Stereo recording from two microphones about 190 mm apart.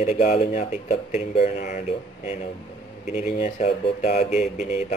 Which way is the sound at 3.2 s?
35° left (ahead or behind).